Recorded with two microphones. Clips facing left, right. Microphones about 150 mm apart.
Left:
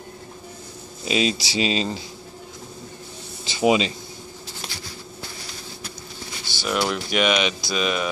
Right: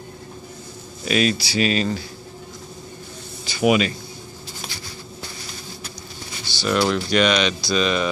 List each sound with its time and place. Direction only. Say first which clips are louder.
1.0 s speech: right 2 dB; 20° left (ahead or behind)
3.4 s a sound: right 1 dB; 25° left (ahead or behind)
6.6 s speech: right 4 dB; 10° left (ahead or behind)